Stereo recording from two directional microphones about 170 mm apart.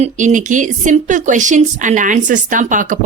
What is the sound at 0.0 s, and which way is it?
Speech, 45° right (ahead or behind).